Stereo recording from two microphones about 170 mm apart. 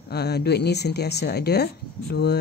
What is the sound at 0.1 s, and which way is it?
Speech, 75° left (ahead or behind).